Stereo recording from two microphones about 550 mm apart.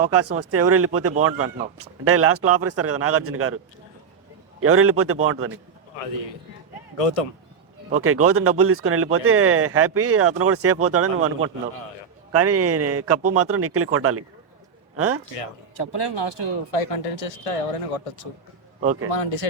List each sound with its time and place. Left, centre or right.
0.1 s speech: right
4.6 s speech: right
6.9 s speech: left
8.0 s a man's voice: right
15.8 s speech: left
16.7 s speech: left